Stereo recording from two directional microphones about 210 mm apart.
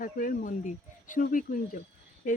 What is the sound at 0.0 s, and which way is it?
Speech, 40° left (ahead or behind).